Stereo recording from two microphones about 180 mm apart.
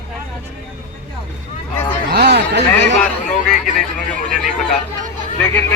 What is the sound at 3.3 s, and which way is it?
Speech, 45° left (ahead or behind).